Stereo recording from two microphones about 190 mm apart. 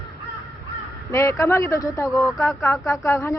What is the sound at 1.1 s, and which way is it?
Speech, 15° left (ahead or behind).